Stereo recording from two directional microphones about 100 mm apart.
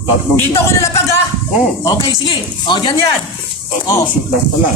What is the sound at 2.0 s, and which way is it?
Speech, 55° left (ahead or behind).